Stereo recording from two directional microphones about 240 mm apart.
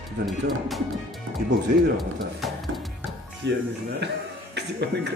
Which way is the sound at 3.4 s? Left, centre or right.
Right.